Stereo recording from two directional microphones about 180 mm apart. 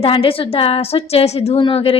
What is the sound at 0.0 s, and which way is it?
A woman's voice, 30° left (ahead or behind).